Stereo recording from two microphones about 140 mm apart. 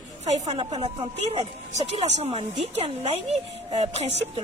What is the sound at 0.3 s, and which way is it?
Speech, 50° right (ahead or behind).